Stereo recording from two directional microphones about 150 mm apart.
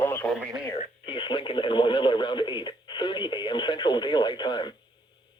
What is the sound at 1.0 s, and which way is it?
Speech, 30° left (ahead or behind).